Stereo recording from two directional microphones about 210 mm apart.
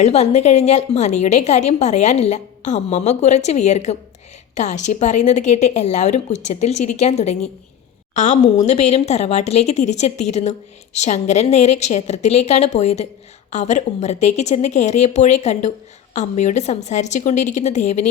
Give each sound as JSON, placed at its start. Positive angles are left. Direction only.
{"t": 0.0, "sound": "a woman's voice", "side_deg": 30}